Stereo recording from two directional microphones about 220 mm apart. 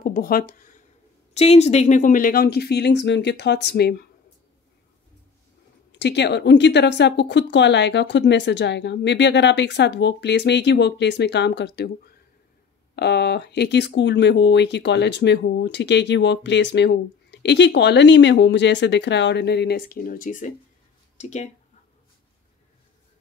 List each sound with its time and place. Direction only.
0.0 s speech: 40° left (ahead or behind)
1.3 s speech: 30° left (ahead or behind); by 4.1 s 45° left (ahead or behind)
5.9 s speech: 50° left (ahead or behind)
12.9 s speech: 50° left (ahead or behind); by 21.5 s 30° left (ahead or behind)